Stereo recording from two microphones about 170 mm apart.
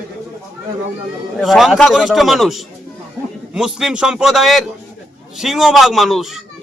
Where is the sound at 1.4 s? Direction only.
Centre (ahead or behind).